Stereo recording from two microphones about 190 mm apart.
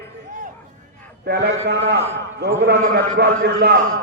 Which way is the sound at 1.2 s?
60° right (ahead or behind).